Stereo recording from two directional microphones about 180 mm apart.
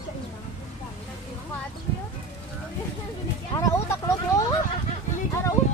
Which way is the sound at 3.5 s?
15° left (ahead or behind).